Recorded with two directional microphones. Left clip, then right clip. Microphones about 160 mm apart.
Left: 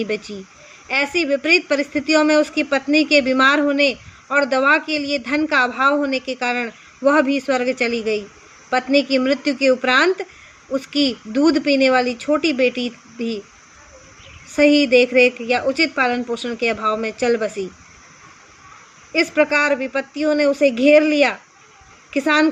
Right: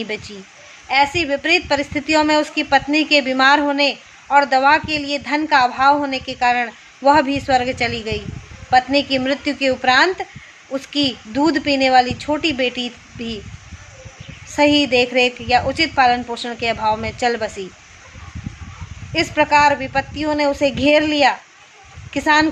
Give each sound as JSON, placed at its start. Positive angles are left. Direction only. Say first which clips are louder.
{"t": 0.0, "sound": "a woman's voice", "louder": "left 2 dB", "side_deg": 20}
{"t": 14.5, "sound": "a woman's voice", "louder": "left 1 dB", "side_deg": 20}
{"t": 19.1, "sound": "speech", "louder": "right 2 dB", "side_deg": 20}